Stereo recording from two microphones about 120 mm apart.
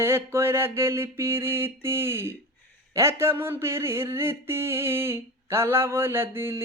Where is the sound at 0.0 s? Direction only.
20° right (ahead or behind).